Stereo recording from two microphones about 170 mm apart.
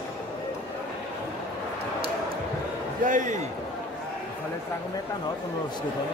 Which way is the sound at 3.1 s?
50° right (ahead or behind).